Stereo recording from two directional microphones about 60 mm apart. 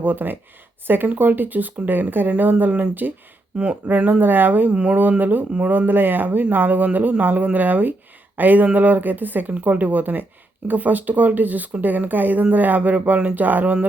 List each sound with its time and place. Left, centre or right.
0.0 s speech: right